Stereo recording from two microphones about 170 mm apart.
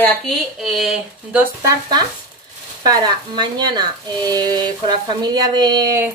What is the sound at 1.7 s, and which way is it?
Speech, 25° right (ahead or behind).